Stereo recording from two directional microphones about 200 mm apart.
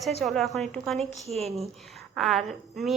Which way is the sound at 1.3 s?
30° right (ahead or behind).